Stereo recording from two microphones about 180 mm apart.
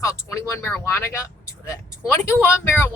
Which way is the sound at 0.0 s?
15° left (ahead or behind).